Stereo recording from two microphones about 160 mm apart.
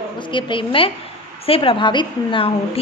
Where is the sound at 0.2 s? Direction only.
30° left (ahead or behind).